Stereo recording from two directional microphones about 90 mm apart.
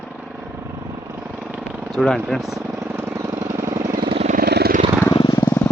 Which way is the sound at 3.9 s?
80° right.